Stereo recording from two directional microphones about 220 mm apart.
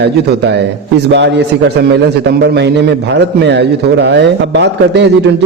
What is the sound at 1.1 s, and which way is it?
A man's voice, 50° right (ahead or behind).